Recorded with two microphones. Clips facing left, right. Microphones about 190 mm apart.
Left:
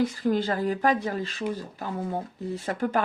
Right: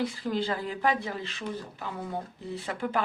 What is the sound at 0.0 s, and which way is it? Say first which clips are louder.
A woman's voice: left 5 dB; 45° left (ahead or behind).